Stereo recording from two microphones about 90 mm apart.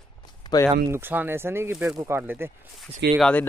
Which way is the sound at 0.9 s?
20° right (ahead or behind).